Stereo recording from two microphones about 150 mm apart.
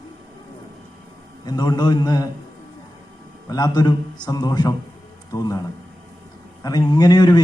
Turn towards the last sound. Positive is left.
turn(degrees=25)  # may be behind; listen again after turning